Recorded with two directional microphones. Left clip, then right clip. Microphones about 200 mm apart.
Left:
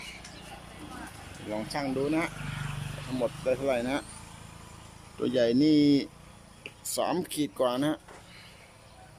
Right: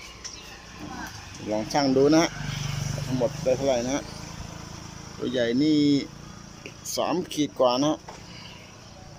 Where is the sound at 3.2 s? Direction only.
Centre (ahead or behind).